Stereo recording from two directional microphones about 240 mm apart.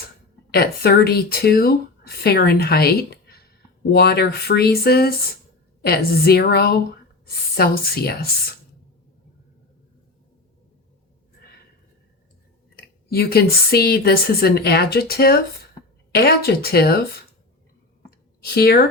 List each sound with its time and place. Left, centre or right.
0.5 s speech: left
12.7 s speech: left
18.4 s speech: left